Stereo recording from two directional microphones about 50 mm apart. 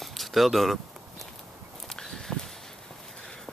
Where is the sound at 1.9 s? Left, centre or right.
Centre.